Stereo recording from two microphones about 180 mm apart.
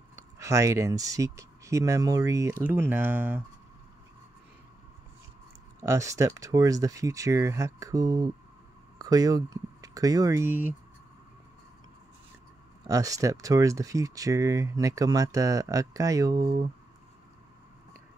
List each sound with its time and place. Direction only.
0.1 s speech: 15° right (ahead or behind)
5.8 s speech: 15° right (ahead or behind)
12.8 s speech: 20° right (ahead or behind)